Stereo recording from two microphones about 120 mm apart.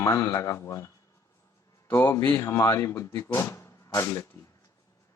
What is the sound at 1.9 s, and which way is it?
Speech, 20° left (ahead or behind).